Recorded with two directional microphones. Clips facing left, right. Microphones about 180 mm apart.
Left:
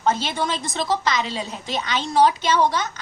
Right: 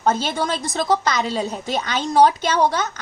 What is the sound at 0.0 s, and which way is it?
A woman's voice, 40° right (ahead or behind).